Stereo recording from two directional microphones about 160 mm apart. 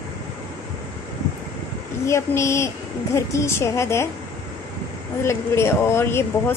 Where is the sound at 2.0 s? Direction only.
15° left (ahead or behind).